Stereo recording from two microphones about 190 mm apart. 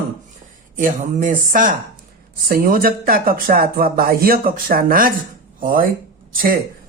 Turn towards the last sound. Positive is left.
turn(degrees=-50)  # may be behind; listen again after turning